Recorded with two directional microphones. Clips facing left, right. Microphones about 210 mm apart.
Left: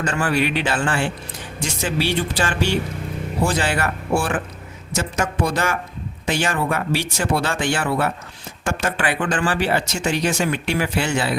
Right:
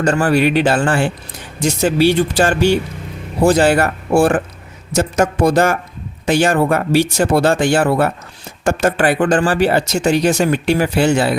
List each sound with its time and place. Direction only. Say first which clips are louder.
0.0 s speech: right 7 dB; 40° right (ahead or behind)